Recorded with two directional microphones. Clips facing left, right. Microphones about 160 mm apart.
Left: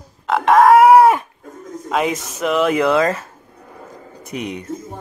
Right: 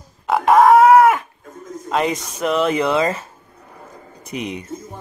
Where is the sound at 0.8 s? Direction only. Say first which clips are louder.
Left 1 dB; 25° left (ahead or behind).